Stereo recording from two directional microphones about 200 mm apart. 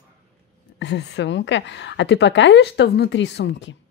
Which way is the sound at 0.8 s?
60° left (ahead or behind).